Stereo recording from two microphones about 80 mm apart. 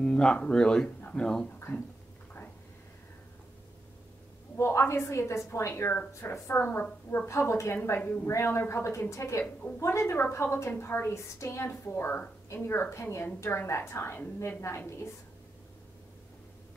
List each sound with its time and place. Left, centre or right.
0.0 s speech: centre
4.6 s a woman's voice: left
9.4 s a woman's voice: left
9.8 s a woman's voice: left